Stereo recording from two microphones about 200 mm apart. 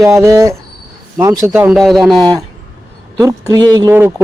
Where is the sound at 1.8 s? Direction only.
Centre (ahead or behind).